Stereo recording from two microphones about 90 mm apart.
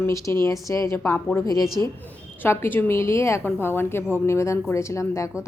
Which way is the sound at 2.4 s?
25° left (ahead or behind).